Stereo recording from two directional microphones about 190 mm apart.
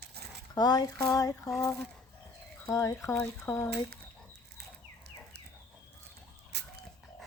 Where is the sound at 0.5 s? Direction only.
20° left (ahead or behind).